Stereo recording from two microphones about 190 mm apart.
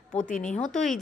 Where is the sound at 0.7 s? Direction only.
Centre (ahead or behind).